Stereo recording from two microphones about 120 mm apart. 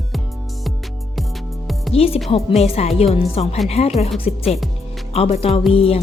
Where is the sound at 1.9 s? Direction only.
55° left (ahead or behind).